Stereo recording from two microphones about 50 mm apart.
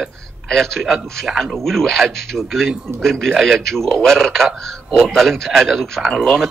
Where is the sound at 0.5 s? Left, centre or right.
Centre.